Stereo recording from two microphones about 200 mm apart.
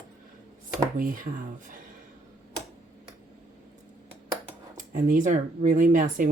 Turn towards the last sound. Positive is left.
turn(degrees=-40)  # may be behind; listen again after turning